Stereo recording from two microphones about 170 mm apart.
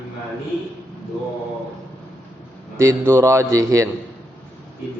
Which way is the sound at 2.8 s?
15° right (ahead or behind).